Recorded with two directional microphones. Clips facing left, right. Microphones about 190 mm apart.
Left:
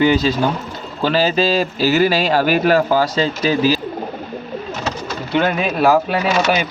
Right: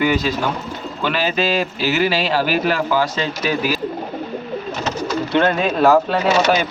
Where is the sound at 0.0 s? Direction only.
30° left (ahead or behind).